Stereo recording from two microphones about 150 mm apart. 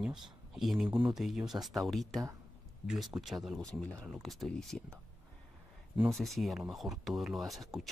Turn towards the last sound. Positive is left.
turn(degrees=0)  # may be behind; listen again after turning